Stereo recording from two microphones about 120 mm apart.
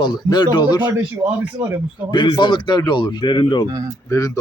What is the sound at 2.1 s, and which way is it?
Speech, 40° left (ahead or behind).